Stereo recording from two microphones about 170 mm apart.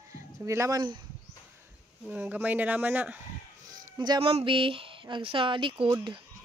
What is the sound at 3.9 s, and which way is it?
Speech, 25° right (ahead or behind).